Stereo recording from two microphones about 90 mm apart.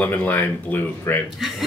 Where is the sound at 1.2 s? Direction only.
Centre (ahead or behind).